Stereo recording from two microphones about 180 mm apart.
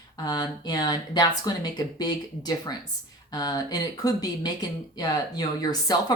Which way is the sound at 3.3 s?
20° left (ahead or behind).